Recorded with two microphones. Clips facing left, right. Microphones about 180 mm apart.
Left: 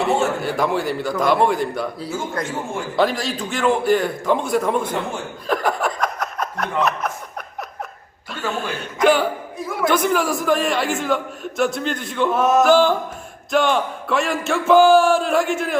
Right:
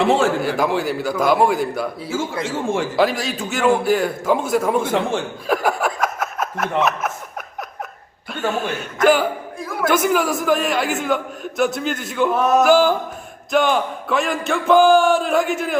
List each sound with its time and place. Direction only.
0.0 s a man's voice: 90° right
0.4 s a man's voice: 5° right (ahead or behind)
2.4 s speech: 90° right
2.9 s a man's voice: centre (ahead or behind)
5.5 s chuckle: 5° right (ahead or behind)
8.5 s a man's voice: 5° right (ahead or behind)